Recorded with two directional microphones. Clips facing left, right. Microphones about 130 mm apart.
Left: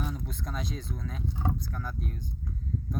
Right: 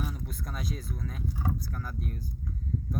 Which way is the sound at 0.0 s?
5° right (ahead or behind).